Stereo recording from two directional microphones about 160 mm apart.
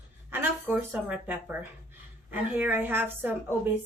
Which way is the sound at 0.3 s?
10° right (ahead or behind).